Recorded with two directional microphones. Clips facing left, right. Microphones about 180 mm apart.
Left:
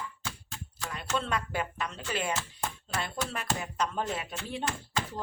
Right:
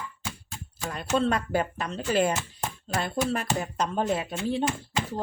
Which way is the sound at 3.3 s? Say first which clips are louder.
Right 5 dB; 35° right (ahead or behind).